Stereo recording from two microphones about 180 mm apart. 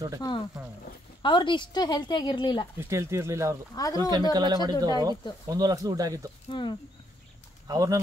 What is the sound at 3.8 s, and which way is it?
Speech, 20° left (ahead or behind).